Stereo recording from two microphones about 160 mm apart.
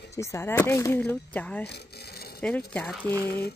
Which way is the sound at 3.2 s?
75° left (ahead or behind).